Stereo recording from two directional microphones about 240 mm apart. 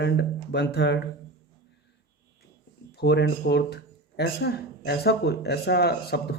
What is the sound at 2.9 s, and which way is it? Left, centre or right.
Speech, left.